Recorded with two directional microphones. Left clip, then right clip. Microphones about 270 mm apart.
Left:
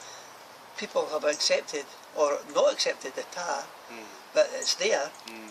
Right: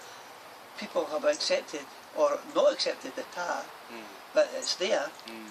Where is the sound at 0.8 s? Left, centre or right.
Left.